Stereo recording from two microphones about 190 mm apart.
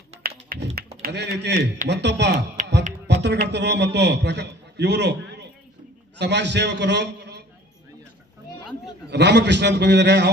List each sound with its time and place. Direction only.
0.2 s tap: 55° right (ahead or behind)
0.8 s a sound: 55° right (ahead or behind)
1.9 s a man's voice: 65° right (ahead or behind)
2.6 s a sound: 40° right (ahead or behind)
3.1 s typing: 65° right (ahead or behind)
3.4 s a man's voice: 65° right (ahead or behind)
9.0 s a man's voice: 65° right (ahead or behind)